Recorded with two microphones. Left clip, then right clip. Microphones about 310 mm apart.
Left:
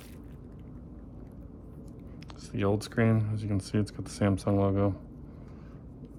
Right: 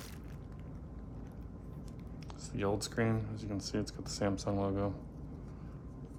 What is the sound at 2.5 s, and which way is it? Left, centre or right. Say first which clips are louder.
Speech: left 5 dB; left.